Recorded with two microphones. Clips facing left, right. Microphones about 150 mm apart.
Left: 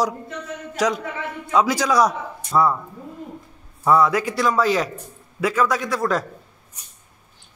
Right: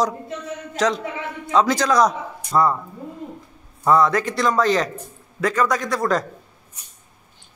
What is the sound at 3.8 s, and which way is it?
A man's voice, 5° left (ahead or behind).